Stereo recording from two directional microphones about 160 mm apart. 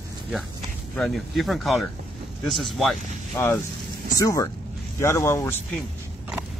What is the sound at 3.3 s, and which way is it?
Speech, 15° left (ahead or behind).